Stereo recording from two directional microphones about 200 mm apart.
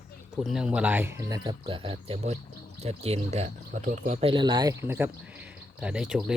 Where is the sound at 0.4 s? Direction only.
5° right (ahead or behind).